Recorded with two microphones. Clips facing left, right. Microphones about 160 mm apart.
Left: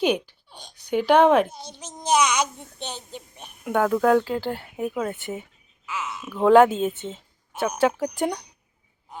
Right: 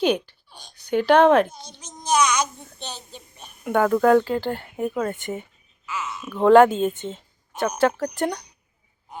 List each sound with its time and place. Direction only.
0.0 s speech: 10° left (ahead or behind)
2.0 s a child's voice: 20° left (ahead or behind)
3.6 s speech: centre (ahead or behind)